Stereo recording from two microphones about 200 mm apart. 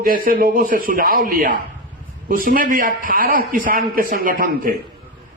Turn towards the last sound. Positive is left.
turn(degrees=-45)  # may be behind; listen again after turning